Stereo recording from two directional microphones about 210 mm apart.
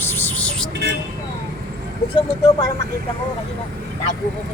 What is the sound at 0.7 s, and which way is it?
Speech, 55° right (ahead or behind).